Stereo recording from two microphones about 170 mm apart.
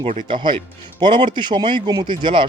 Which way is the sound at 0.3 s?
30° right (ahead or behind).